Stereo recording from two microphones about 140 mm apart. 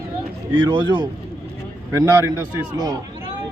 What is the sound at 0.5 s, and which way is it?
Speech, 35° right (ahead or behind).